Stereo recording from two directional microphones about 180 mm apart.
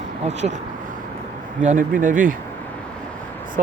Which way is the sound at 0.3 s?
40° right (ahead or behind).